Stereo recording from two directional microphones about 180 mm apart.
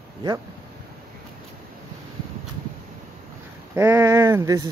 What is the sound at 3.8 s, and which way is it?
Speech, 15° right (ahead or behind).